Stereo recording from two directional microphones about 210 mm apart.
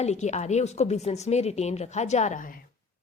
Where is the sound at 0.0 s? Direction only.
35° left (ahead or behind).